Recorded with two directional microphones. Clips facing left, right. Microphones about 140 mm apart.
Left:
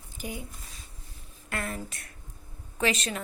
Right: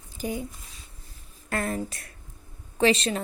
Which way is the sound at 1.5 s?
35° right (ahead or behind).